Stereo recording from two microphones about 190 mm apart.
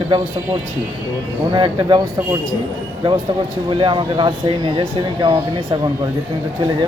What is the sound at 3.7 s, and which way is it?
Speech, 25° right (ahead or behind).